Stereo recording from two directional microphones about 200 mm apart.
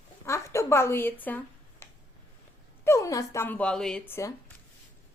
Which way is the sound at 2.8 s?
15° left (ahead or behind).